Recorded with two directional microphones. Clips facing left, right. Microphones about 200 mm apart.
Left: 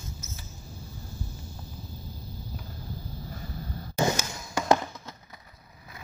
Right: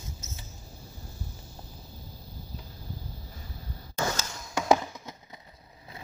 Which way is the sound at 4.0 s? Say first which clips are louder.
Left 5 dB; 20° left (ahead or behind).